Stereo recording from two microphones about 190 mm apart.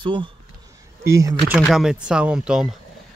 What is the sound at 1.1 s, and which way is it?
Speech, 15° right (ahead or behind).